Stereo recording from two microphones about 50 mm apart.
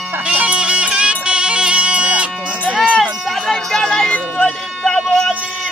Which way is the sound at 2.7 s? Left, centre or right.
Centre.